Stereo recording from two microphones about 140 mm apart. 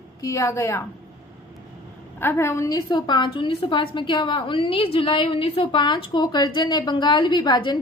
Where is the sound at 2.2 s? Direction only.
15° left (ahead or behind).